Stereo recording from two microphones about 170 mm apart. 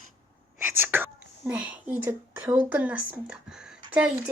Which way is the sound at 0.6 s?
10° right (ahead or behind).